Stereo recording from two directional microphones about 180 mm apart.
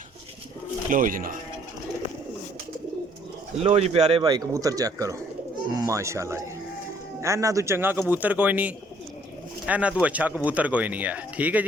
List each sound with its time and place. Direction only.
0.9 s speech: 50° right (ahead or behind)
3.6 s speech: 35° right (ahead or behind)
4.2 s speech: 20° right (ahead or behind)